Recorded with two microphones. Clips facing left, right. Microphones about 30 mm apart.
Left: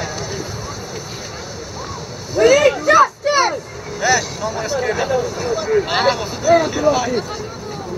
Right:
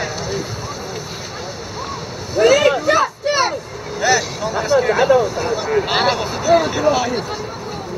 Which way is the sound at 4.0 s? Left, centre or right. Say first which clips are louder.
Even; centre.